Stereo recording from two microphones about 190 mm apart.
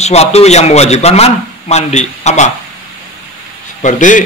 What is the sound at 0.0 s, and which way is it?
A man's voice, 35° left (ahead or behind).